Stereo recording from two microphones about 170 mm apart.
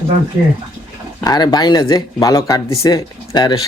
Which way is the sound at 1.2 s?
25° left (ahead or behind).